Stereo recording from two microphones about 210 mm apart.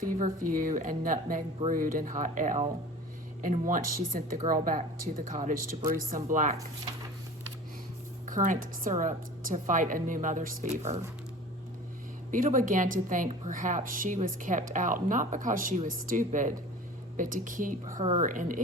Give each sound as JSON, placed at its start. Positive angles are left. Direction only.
{"t": 0.0, "sound": "a woman's voice", "side_deg": -40}
{"t": 8.3, "sound": "a woman's voice", "side_deg": -35}
{"t": 12.3, "sound": "a woman's voice", "side_deg": -40}